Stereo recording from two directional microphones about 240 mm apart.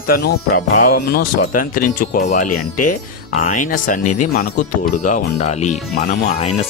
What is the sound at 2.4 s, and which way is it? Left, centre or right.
Speech, left.